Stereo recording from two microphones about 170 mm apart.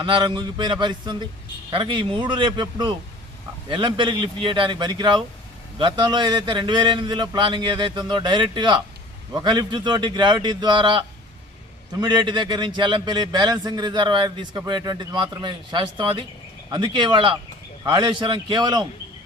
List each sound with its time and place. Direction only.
0.0 s a man's voice: 25° right (ahead or behind)